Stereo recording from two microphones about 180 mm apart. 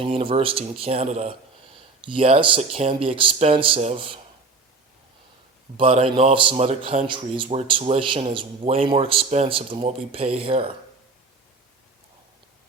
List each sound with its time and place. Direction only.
0.0 s a man's voice: 30° right (ahead or behind)
5.7 s a man's voice: 30° right (ahead or behind)